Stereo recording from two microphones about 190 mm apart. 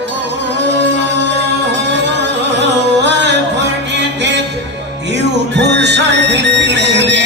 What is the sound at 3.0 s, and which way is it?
Music, 65° right (ahead or behind).